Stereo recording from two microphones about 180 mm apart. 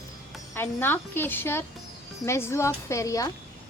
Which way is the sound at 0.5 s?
10° left (ahead or behind).